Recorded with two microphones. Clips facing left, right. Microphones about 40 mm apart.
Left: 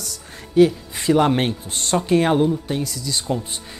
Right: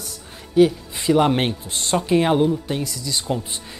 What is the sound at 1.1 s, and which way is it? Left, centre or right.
Speech, centre.